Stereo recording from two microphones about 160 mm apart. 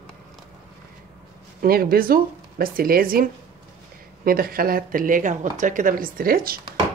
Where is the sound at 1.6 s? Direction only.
70° right (ahead or behind).